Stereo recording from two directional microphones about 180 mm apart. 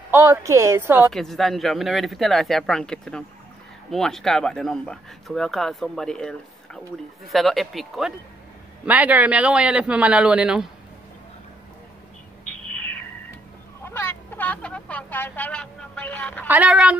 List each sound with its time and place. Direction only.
0.1 s a man's voice: 15° right (ahead or behind)
1.1 s a man's voice: centre (ahead or behind)
12.7 s a sound: 10° left (ahead or behind)
13.8 s speech: 10° left (ahead or behind)
16.4 s a man's voice: 10° right (ahead or behind)